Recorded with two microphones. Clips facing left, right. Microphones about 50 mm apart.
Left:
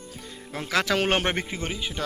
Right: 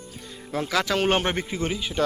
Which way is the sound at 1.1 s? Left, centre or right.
Left.